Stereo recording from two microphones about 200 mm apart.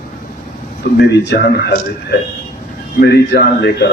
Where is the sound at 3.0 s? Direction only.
50° left (ahead or behind).